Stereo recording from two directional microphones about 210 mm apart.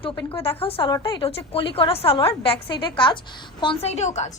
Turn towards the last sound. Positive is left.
turn(degrees=35)  # may be behind; listen again after turning